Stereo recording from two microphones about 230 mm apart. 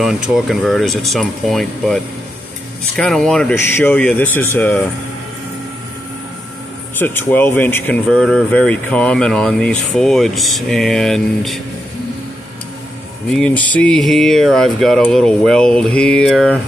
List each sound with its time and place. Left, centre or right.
0.0 s speech: centre
3.0 s speech: centre
7.0 s speech: centre
13.3 s speech: centre